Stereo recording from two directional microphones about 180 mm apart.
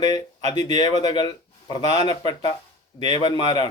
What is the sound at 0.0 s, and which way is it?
Speech, 20° left (ahead or behind).